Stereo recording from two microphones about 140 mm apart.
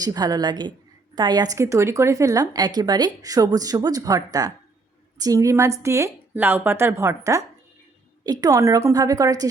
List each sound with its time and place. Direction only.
0.0 s a woman's voice: 25° right (ahead or behind)